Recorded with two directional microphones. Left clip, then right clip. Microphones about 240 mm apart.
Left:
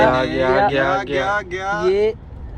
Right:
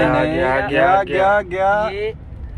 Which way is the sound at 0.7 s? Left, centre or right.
Centre.